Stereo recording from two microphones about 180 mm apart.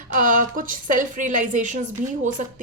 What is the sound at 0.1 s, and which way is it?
A woman's voice, 45° right (ahead or behind).